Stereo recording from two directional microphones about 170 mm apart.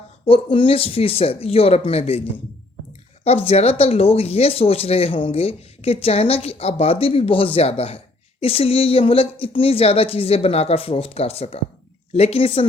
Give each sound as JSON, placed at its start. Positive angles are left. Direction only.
{"t": 0.3, "sound": "speech", "side_deg": 30}
{"t": 3.2, "sound": "speech", "side_deg": 35}